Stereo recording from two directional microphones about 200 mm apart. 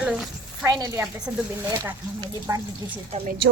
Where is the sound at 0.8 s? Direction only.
20° right (ahead or behind).